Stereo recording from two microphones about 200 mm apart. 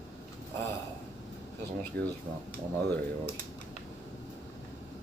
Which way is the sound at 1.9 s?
50° right (ahead or behind).